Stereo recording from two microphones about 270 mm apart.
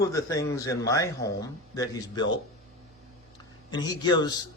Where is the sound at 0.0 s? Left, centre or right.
Centre.